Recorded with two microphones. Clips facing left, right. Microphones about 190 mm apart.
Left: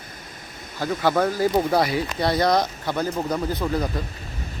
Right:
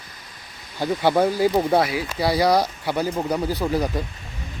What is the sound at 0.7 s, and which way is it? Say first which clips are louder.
Speech: right 2 dB; 25° right (ahead or behind).